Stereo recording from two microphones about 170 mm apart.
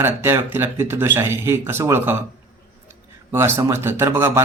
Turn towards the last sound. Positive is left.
turn(degrees=-15)  # may be behind; listen again after turning